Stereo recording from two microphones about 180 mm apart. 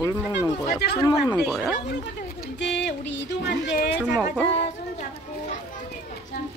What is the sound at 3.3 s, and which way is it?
Speech, 70° left (ahead or behind).